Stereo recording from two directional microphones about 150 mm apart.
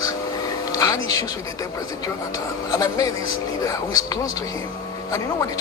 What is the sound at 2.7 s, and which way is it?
Speech, 25° left (ahead or behind).